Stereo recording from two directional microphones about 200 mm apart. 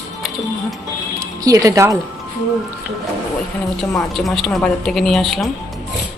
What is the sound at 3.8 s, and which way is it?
A woman's voice, centre (ahead or behind).